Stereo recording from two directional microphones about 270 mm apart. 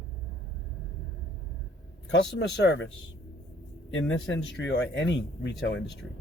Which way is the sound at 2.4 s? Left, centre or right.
Left.